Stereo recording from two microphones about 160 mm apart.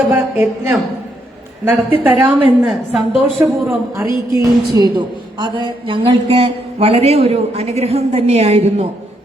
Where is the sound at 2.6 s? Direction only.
Centre (ahead or behind).